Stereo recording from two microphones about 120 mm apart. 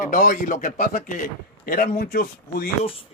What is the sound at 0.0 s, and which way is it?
Speech, 90° left.